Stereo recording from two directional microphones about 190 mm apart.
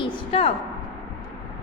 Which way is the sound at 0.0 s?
30° left (ahead or behind).